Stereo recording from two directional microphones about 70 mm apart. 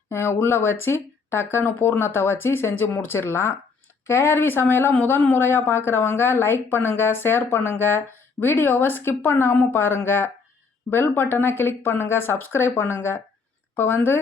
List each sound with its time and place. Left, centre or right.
0.1 s speech: left